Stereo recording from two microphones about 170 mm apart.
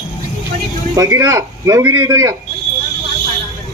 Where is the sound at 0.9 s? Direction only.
20° right (ahead or behind).